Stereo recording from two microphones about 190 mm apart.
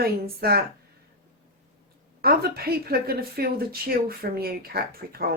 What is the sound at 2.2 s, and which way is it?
Speech, 55° right (ahead or behind).